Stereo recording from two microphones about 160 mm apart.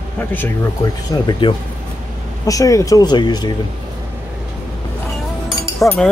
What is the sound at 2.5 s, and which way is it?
Speech, 20° left (ahead or behind).